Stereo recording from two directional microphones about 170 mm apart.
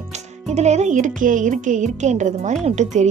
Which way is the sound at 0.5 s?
40° right (ahead or behind).